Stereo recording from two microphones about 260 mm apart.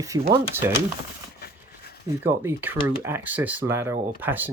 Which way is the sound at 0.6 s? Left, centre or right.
Centre.